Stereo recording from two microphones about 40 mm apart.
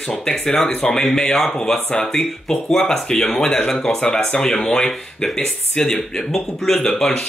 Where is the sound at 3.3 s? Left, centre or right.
Left.